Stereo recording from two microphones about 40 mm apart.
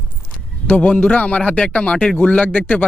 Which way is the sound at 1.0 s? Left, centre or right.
Left.